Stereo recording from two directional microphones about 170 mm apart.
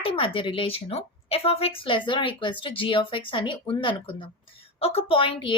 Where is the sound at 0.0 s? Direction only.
30° left (ahead or behind).